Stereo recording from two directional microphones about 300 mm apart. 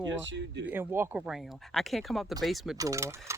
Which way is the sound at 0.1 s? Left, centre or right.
Right.